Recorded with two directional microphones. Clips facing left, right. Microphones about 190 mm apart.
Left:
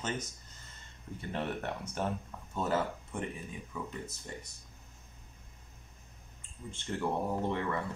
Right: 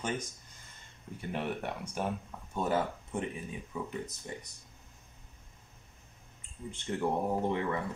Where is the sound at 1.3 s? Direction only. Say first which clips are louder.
Right 1 dB; 10° right (ahead or behind).